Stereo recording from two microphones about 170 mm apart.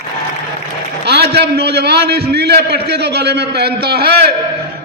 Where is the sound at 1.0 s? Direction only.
75° right (ahead or behind).